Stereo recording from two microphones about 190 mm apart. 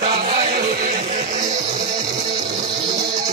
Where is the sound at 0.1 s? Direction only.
35° right (ahead or behind).